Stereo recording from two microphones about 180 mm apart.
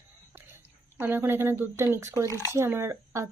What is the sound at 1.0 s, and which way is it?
Speech, 10° right (ahead or behind).